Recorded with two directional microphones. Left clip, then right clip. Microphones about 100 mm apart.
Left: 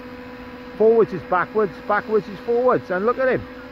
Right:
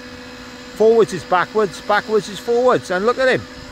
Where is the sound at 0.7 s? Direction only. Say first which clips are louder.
Right 3 dB; 50° right (ahead or behind).